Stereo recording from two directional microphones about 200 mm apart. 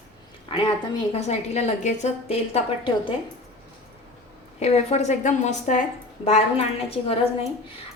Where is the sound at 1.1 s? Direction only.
35° left (ahead or behind).